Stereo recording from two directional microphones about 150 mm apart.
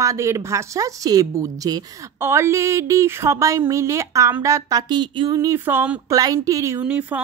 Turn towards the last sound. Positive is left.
turn(degrees=-10)  # may be behind; listen again after turning